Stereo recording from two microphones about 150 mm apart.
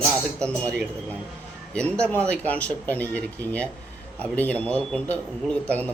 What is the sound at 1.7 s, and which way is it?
A man's voice, 5° left (ahead or behind).